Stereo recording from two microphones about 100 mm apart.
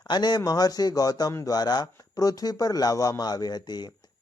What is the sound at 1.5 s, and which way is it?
Speech, 40° left (ahead or behind).